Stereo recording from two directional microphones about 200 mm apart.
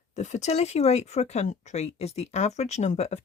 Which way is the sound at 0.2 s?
35° left (ahead or behind).